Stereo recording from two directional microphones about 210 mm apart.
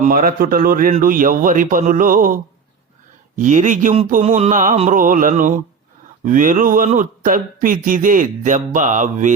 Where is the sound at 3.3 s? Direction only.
35° right (ahead or behind).